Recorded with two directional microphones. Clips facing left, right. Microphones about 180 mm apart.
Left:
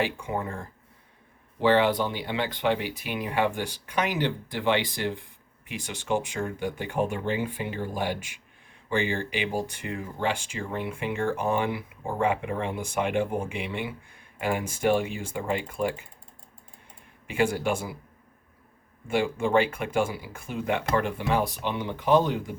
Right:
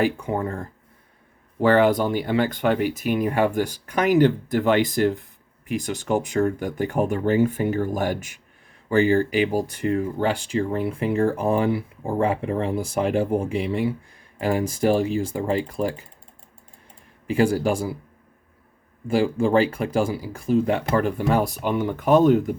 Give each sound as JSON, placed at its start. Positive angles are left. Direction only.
{"t": 0.0, "sound": "speech", "side_deg": -40}
{"t": 17.2, "sound": "speech", "side_deg": -35}
{"t": 19.0, "sound": "speech", "side_deg": -35}